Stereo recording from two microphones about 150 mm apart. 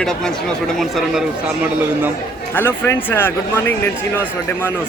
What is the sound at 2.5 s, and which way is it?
A man's voice, 15° left (ahead or behind).